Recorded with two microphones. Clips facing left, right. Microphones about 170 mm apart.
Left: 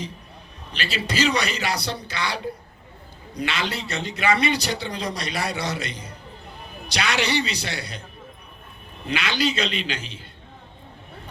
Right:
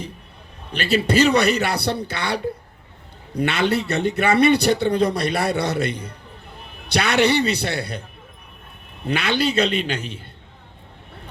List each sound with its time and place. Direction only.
0.7 s speech: 55° right (ahead or behind)
9.0 s speech: 55° right (ahead or behind)